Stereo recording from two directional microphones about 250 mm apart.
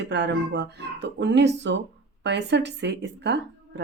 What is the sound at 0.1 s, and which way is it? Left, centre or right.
Speech, right.